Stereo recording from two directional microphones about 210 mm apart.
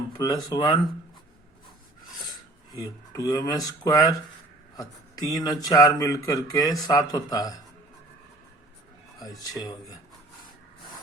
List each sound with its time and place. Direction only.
0.2 s speech: 20° left (ahead or behind)
2.7 s speech: 15° left (ahead or behind)
9.1 s speech: 15° left (ahead or behind)